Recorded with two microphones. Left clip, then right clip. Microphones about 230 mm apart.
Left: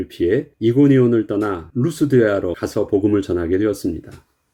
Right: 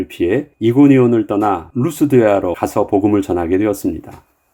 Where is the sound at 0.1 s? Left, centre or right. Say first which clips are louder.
Even; right.